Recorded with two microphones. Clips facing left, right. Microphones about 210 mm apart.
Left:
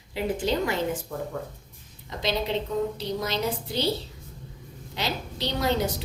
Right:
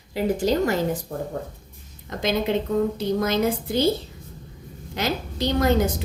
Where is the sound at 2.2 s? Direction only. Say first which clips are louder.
Right 4 dB; 50° right (ahead or behind).